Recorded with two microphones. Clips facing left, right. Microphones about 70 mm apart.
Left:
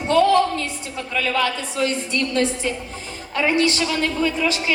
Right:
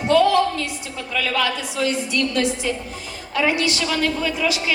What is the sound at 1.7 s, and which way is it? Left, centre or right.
A woman's voice, left.